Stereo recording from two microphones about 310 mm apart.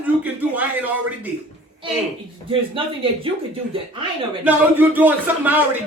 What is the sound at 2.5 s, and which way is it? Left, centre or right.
Speech, centre.